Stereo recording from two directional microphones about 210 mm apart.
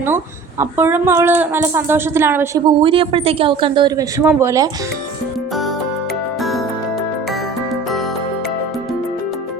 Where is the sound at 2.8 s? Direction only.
25° right (ahead or behind).